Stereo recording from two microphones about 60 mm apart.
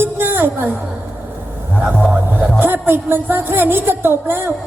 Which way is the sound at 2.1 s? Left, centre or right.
Right.